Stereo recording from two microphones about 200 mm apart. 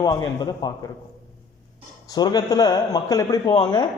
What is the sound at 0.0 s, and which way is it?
Speech, 20° left (ahead or behind).